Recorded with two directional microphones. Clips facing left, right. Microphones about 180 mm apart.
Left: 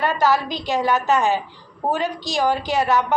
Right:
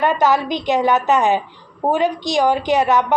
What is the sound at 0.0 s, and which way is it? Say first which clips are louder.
A woman's voice: right 3 dB; 20° right (ahead or behind).